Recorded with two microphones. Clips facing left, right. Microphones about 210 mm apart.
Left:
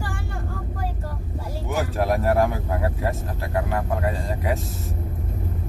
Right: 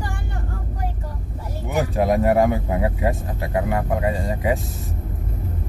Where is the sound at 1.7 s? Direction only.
15° right (ahead or behind).